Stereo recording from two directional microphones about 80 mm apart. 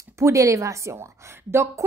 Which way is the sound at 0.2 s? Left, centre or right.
Right.